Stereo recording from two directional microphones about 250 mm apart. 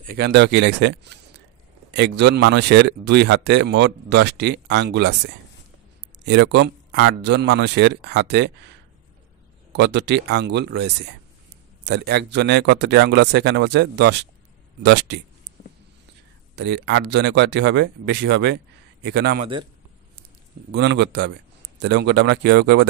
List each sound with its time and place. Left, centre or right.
0.0 s speech: right
9.7 s speech: right
15.6 s a sound: left
16.5 s speech: right
20.7 s speech: right